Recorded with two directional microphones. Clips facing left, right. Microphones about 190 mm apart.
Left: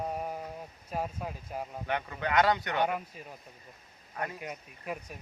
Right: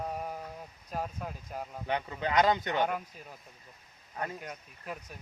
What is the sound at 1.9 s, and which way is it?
Speech, 20° right (ahead or behind).